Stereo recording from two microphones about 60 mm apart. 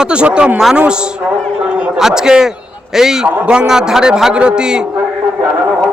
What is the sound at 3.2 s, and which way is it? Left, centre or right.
A man's voice, right.